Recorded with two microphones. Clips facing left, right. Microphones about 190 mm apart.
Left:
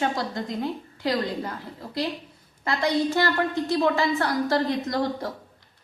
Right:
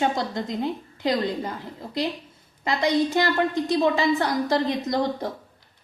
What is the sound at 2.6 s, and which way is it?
A woman's voice, 20° right (ahead or behind).